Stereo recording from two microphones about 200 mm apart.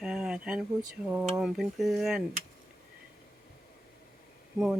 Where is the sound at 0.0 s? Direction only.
5° right (ahead or behind).